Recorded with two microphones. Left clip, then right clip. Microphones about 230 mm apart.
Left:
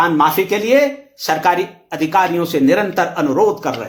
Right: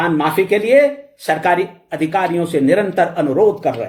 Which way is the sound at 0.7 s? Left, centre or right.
Centre.